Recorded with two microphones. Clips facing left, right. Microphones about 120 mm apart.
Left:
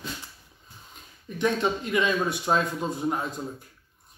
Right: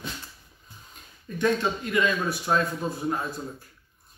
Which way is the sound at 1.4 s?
20° left (ahead or behind).